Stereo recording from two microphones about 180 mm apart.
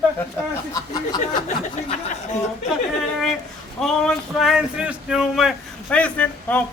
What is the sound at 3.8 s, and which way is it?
Speech, centre (ahead or behind).